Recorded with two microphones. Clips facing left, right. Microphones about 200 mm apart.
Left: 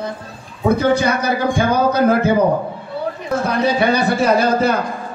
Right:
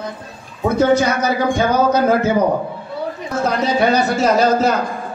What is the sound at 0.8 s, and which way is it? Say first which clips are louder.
A man's voice: right 2 dB; 60° left (ahead or behind).